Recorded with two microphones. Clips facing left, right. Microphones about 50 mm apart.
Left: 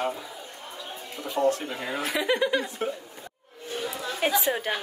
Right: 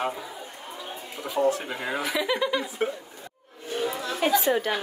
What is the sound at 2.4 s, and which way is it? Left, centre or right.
Speech, left.